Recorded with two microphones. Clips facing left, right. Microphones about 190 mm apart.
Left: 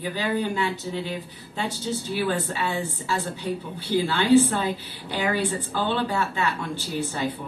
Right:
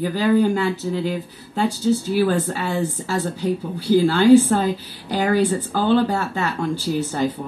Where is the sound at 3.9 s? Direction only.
45° right (ahead or behind).